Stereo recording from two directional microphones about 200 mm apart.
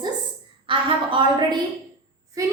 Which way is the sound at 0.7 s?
25° right (ahead or behind).